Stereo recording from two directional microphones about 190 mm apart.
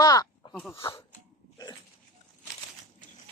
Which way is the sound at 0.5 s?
5° left (ahead or behind).